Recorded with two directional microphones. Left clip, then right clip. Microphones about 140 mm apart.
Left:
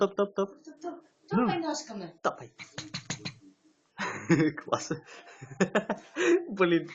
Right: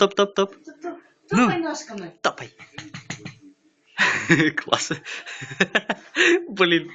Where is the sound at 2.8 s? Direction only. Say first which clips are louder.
Right 2 dB; 40° left (ahead or behind).